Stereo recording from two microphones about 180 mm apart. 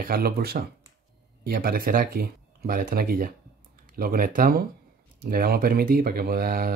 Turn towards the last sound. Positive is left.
turn(degrees=-55)  # may be behind; listen again after turning